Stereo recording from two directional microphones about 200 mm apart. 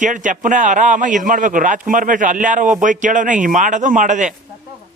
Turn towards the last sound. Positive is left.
turn(degrees=-40)  # may be behind; listen again after turning